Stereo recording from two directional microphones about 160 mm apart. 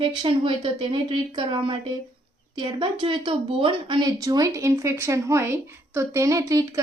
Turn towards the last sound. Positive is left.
turn(degrees=-20)  # may be behind; listen again after turning